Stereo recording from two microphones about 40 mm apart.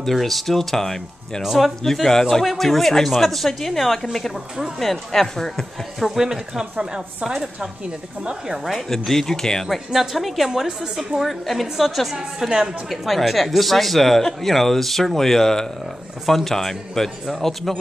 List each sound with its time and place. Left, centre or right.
0.0 s speech: centre
1.4 s speech: centre
2.0 s speech: centre
6.0 s speech: centre
8.8 s speech: centre
9.7 s speech: centre
12.4 s a woman's voice: centre
12.9 s speech: centre